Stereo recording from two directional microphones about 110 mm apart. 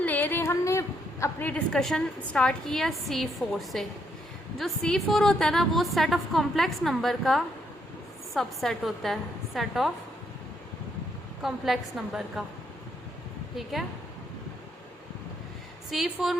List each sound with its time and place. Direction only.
0.0 s a sound: 15° left (ahead or behind)
1.5 s a woman's voice: 10° left (ahead or behind)
11.4 s a woman's voice: centre (ahead or behind)
13.6 s a woman's voice: centre (ahead or behind)
15.9 s a woman's voice: centre (ahead or behind)